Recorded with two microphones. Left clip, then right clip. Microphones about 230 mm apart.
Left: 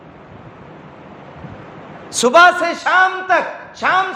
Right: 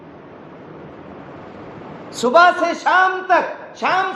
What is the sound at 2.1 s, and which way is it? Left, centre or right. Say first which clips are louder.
A man's voice: left 3 dB; left.